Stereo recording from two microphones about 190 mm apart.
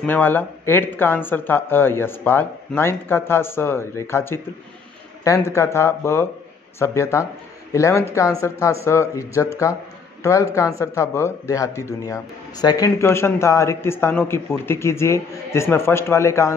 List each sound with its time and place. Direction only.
0.0 s speech: 10° left (ahead or behind)